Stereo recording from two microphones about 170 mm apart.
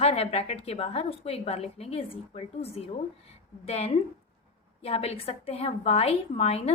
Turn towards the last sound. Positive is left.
turn(degrees=35)  # may be behind; listen again after turning